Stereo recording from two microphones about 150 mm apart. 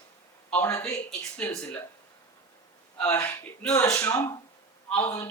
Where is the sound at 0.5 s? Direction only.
15° left (ahead or behind).